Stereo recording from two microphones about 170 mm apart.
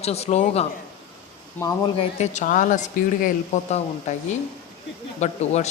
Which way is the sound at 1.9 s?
45° left (ahead or behind).